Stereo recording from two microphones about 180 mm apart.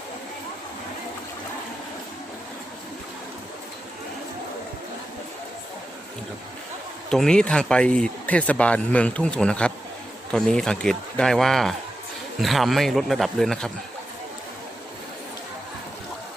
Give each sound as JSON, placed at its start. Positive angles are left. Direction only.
{"t": 7.1, "sound": "speech", "side_deg": 5}